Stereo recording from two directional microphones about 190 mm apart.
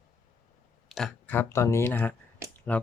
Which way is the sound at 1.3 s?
15° left (ahead or behind).